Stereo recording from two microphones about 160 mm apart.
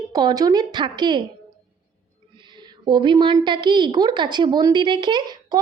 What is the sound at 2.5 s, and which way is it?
A woman's voice, 30° right (ahead or behind).